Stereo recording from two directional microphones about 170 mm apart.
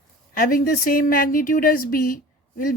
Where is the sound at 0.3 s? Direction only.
55° left (ahead or behind).